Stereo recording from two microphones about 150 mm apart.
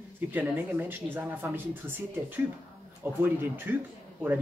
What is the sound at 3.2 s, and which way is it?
Speech, 15° right (ahead or behind).